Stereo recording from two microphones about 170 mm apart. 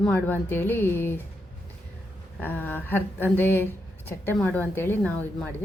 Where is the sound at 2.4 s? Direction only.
10° left (ahead or behind).